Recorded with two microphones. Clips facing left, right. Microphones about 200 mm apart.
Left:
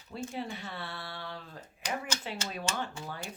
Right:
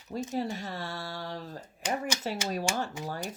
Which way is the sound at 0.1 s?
40° right (ahead or behind).